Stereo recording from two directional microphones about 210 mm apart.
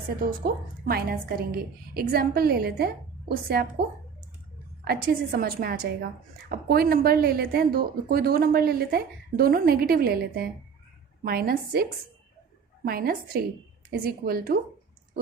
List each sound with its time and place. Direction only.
0.2 s speech: 45° right (ahead or behind)
4.9 s speech: 45° right (ahead or behind)
12.8 s speech: 45° right (ahead or behind)